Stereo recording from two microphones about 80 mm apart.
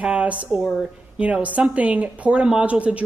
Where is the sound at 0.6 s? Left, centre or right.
Centre.